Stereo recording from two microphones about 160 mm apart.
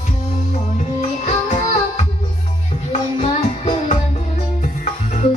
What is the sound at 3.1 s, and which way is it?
Music, 45° left (ahead or behind).